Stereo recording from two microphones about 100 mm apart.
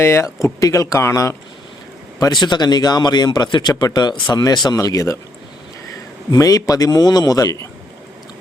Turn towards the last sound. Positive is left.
turn(degrees=35)  # may be behind; listen again after turning